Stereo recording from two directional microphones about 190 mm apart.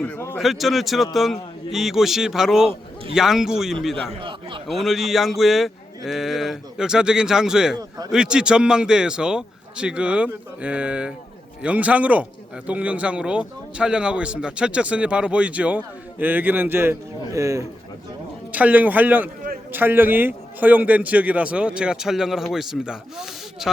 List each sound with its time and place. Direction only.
0.0 s speech: 10° left (ahead or behind)
0.3 s speech: centre (ahead or behind)
4.2 s a sound: 25° right (ahead or behind)
4.7 s speech: centre (ahead or behind)